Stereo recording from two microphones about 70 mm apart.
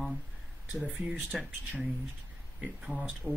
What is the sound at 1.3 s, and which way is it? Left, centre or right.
Speech, centre.